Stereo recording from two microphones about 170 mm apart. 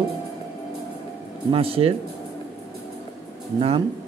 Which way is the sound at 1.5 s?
35° right (ahead or behind).